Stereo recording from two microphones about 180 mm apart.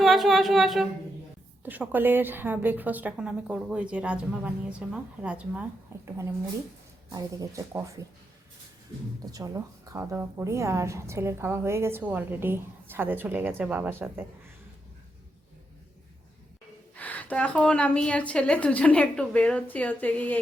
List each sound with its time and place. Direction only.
0.0 s humming: centre (ahead or behind)
1.6 s a woman's voice: 10° right (ahead or behind)
7.1 s a woman's voice: 20° right (ahead or behind)
9.2 s a woman's voice: 20° right (ahead or behind)
16.9 s a woman's voice: 10° left (ahead or behind)